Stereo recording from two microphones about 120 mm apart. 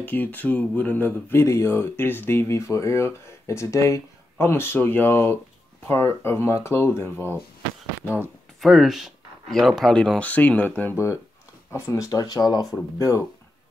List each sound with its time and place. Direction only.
0.0 s speech: 15° left (ahead or behind)
8.5 s speech: centre (ahead or behind); by 12.6 s 35° left (ahead or behind)